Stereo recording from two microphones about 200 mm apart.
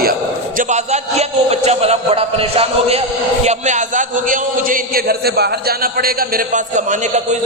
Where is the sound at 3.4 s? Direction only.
35° right (ahead or behind).